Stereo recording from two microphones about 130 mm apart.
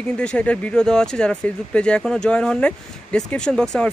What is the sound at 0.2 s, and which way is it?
Speech, 10° left (ahead or behind).